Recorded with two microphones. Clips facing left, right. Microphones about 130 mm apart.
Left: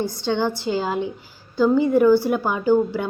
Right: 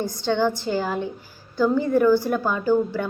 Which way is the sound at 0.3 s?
15° left (ahead or behind).